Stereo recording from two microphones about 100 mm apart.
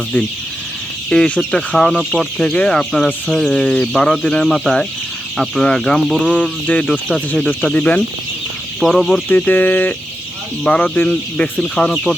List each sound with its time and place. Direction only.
1.1 s speech: 5° left (ahead or behind)
8.8 s speech: centre (ahead or behind)
9.3 s speech: 15° left (ahead or behind)